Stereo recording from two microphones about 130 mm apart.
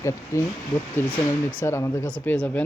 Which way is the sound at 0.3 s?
25° left (ahead or behind).